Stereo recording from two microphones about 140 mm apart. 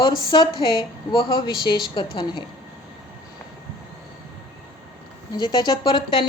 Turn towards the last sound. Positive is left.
turn(degrees=35)  # may be behind; listen again after turning